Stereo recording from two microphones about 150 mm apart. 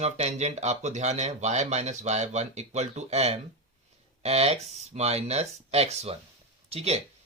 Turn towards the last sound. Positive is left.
turn(degrees=-45)  # may be behind; listen again after turning